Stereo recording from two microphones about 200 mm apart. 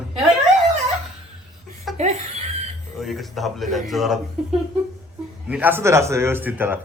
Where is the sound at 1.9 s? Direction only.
Centre (ahead or behind).